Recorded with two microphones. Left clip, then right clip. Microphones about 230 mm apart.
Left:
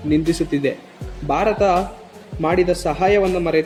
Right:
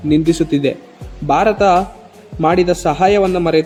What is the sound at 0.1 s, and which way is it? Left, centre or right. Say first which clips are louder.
Speech: right 5 dB; right.